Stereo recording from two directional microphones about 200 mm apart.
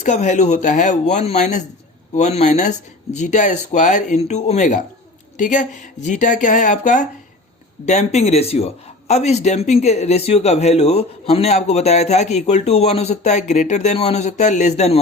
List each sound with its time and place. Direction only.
0.0 s speech: 35° left (ahead or behind)